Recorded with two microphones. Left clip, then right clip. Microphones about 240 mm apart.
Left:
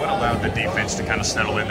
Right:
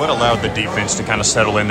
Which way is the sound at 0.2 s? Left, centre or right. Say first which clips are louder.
Right 6 dB; centre.